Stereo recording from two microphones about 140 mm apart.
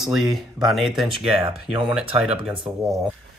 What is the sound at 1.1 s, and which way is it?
Speech, 35° right (ahead or behind).